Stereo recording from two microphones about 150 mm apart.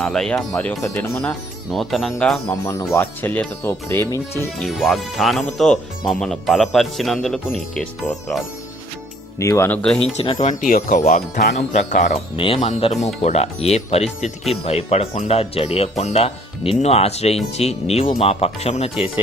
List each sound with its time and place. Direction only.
0.0 s a man's voice: 5° left (ahead or behind)
1.3 s a man's voice: centre (ahead or behind)
2.5 s speech: 15° left (ahead or behind)
4.6 s a man's voice: centre (ahead or behind)
9.4 s speech: 20° left (ahead or behind)
10.0 s speech: 45° left (ahead or behind)
12.1 s speech: 35° left (ahead or behind)